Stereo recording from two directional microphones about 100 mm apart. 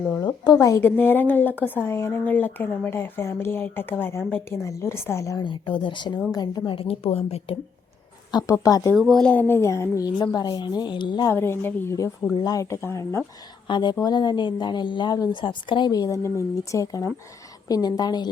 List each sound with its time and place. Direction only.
0.1 s speech: 20° left (ahead or behind)
5.4 s a woman's voice: 55° left (ahead or behind)
6.7 s a woman's voice: 65° left (ahead or behind)
8.3 s a woman's voice: 40° left (ahead or behind)
9.0 s speech: centre (ahead or behind)
9.3 s speech: 20° left (ahead or behind)
10.2 s speech: 45° left (ahead or behind)
11.3 s speech: 25° left (ahead or behind)
12.4 s a woman's voice: 40° left (ahead or behind)
12.7 s speech: 30° left (ahead or behind)
13.7 s speech: 50° left (ahead or behind)
15.9 s a woman's voice: 35° left (ahead or behind)